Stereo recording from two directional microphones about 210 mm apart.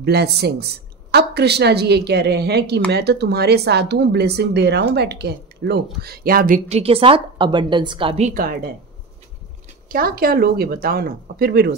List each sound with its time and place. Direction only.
0.0 s a woman's voice: 50° right (ahead or behind)
9.8 s speech: 45° right (ahead or behind)